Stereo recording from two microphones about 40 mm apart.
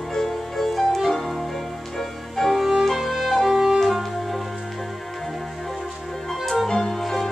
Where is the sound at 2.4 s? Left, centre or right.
Centre.